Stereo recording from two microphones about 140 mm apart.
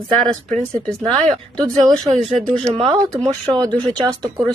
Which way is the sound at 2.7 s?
40° right (ahead or behind).